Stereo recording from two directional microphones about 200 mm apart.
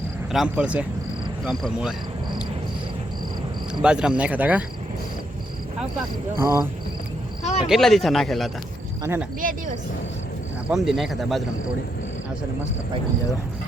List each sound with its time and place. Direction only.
0.3 s speech: 5° right (ahead or behind)
3.8 s speech: 5° right (ahead or behind)
6.3 s speech: 15° right (ahead or behind)
7.4 s cricket: 35° left (ahead or behind)
7.7 s speech: centre (ahead or behind)
10.7 s speech: centre (ahead or behind)